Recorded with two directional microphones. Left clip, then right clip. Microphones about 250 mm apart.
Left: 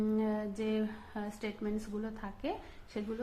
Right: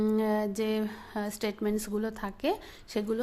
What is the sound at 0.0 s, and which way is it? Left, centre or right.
A woman's voice, right.